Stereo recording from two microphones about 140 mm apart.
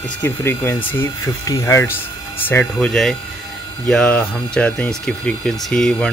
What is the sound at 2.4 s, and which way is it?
Speech, 10° left (ahead or behind).